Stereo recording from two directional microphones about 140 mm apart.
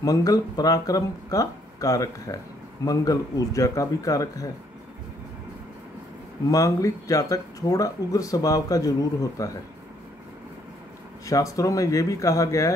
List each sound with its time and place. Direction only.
0.0 s speech: 25° left (ahead or behind)
6.5 s speech: 25° left (ahead or behind)
11.2 s speech: 25° left (ahead or behind)